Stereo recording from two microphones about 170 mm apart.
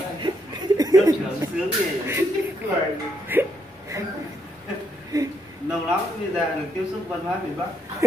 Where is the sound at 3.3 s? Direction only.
10° right (ahead or behind).